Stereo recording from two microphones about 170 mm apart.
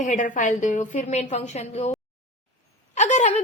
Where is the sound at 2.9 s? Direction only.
45° left (ahead or behind).